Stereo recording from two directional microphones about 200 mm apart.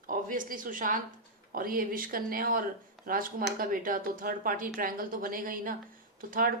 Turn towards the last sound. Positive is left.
turn(degrees=-45)  # may be behind; listen again after turning